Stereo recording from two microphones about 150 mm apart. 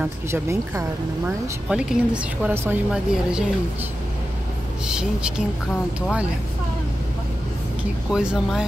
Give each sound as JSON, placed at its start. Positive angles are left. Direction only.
{"t": 0.0, "sound": "speech", "side_deg": -20}
{"t": 1.7, "sound": "speech", "side_deg": -5}
{"t": 4.8, "sound": "speech", "side_deg": -5}
{"t": 8.1, "sound": "speech", "side_deg": -5}